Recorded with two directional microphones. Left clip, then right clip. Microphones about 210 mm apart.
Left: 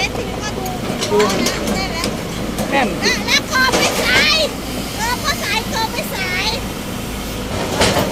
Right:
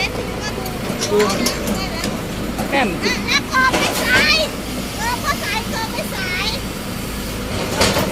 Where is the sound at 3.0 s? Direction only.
55° left (ahead or behind).